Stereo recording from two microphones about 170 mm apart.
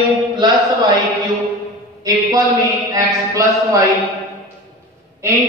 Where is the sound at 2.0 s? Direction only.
20° right (ahead or behind).